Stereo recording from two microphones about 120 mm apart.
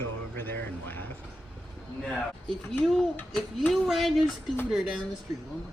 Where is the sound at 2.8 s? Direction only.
5° left (ahead or behind).